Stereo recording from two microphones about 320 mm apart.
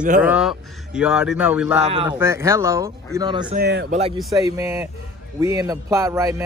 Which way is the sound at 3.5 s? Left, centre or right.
Right.